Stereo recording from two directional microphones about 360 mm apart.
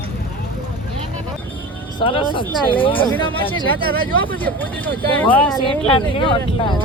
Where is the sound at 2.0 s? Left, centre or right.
Centre.